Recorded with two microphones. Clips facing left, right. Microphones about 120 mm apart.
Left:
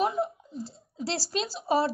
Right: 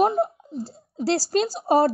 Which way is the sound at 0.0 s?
45° right (ahead or behind).